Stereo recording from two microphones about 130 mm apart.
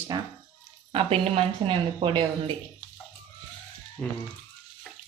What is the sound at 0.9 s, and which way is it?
Speech, 50° right (ahead or behind).